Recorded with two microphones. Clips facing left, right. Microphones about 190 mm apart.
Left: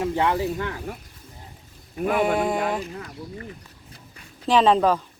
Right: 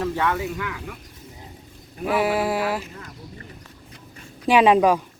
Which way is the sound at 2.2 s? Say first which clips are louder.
Right 1 dB; 5° right (ahead or behind).